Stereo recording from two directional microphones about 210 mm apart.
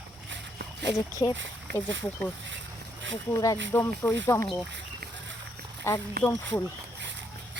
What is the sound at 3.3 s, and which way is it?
Speech, 15° left (ahead or behind).